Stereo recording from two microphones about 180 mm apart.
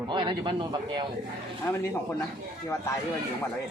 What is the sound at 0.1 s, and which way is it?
Speech, 25° right (ahead or behind).